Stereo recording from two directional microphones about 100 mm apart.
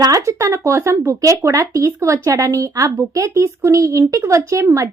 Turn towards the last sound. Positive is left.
turn(degrees=-30)  # may be behind; listen again after turning